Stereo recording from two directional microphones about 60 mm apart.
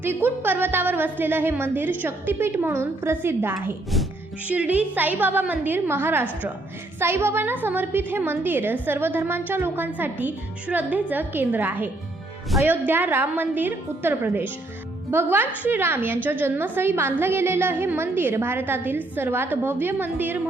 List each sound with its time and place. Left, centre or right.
0.0 s a woman's voice: right
4.4 s a woman's voice: right